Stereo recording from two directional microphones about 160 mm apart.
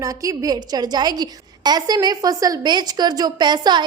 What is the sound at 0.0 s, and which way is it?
A woman's voice, 20° right (ahead or behind).